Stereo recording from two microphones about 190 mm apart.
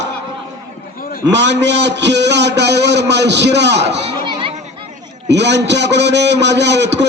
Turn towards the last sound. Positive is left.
turn(degrees=-65)  # may be behind; listen again after turning